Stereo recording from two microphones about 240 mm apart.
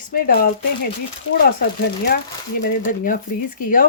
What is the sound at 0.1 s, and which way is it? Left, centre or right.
Speech, left.